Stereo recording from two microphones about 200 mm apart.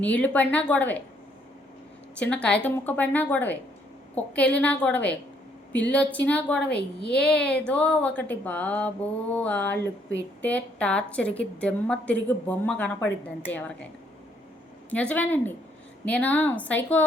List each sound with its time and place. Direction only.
0.0 s a woman's voice: 5° left (ahead or behind)
2.1 s a woman's voice: 5° left (ahead or behind)
6.7 s a woman's voice: 55° left (ahead or behind)
7.2 s a woman's voice: 5° left (ahead or behind)
15.1 s a woman's voice: 10° left (ahead or behind)